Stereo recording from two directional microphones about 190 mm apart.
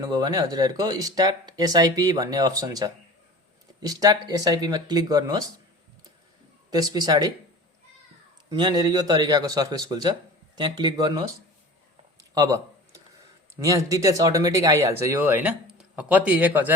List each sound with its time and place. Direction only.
0.0 s speech: 20° right (ahead or behind)
6.7 s speech: 20° right (ahead or behind)
8.4 s speech: 20° right (ahead or behind)
12.3 s a sound: 20° right (ahead or behind)
13.6 s speech: 15° right (ahead or behind)